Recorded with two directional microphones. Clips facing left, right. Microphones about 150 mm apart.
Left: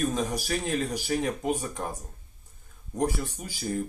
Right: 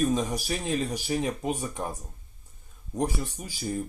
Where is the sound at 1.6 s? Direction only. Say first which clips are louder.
Even; 15° right (ahead or behind).